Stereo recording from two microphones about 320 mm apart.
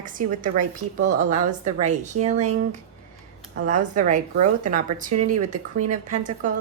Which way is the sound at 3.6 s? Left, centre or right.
Right.